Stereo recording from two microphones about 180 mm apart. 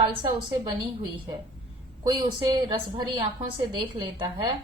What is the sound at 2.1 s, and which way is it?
A woman's voice, 25° right (ahead or behind).